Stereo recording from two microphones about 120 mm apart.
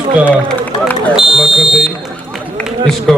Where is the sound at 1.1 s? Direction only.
5° right (ahead or behind).